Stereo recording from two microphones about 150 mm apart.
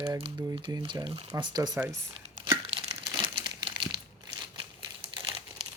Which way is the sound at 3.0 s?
30° right (ahead or behind).